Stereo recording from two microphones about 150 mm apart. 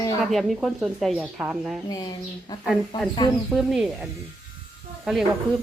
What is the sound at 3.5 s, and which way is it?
Speech, centre (ahead or behind).